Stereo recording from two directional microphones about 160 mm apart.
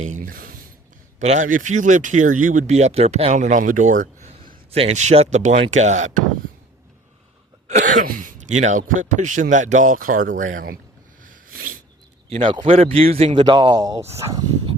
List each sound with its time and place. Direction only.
0.0 s a sound: 55° right (ahead or behind)
1.2 s speech: 50° right (ahead or behind)
4.4 s speech: 40° right (ahead or behind)
7.7 s speech: 55° right (ahead or behind)
11.2 s sneeze: 60° right (ahead or behind)
12.3 s speech: 30° right (ahead or behind)
13.6 s speech: 25° right (ahead or behind)